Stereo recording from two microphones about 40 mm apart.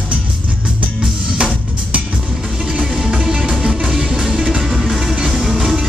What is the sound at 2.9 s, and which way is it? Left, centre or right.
Music, centre.